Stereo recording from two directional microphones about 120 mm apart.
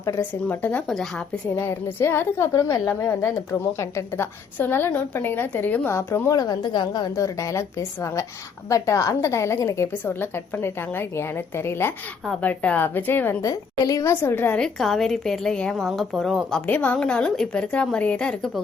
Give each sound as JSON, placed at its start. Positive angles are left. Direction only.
{"t": 0.2, "sound": "a woman's voice", "side_deg": 15}
{"t": 0.9, "sound": "a woman's voice", "side_deg": 5}
{"t": 1.6, "sound": "a woman's voice", "side_deg": 20}
{"t": 13.4, "sound": "a woman's voice", "side_deg": 30}
{"t": 14.6, "sound": "a woman's voice", "side_deg": 5}